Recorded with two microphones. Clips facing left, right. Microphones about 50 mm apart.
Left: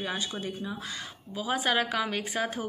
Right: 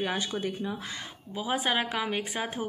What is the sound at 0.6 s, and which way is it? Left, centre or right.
Speech, right.